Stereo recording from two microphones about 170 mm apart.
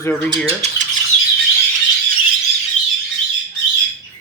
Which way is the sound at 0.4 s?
40° right (ahead or behind).